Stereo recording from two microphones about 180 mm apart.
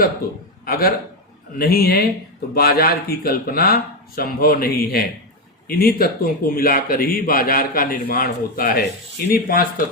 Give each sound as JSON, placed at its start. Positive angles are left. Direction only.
{"t": 0.6, "sound": "a man's voice", "side_deg": 55}